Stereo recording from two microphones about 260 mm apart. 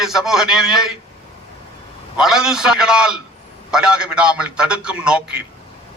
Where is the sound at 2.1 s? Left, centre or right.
Centre.